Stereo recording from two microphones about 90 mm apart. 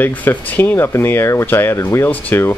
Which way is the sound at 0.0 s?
20° left (ahead or behind).